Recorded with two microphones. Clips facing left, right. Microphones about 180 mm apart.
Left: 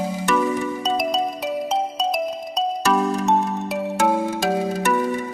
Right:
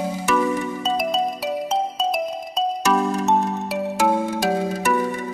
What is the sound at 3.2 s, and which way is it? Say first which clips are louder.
Music: even; centre (ahead or behind).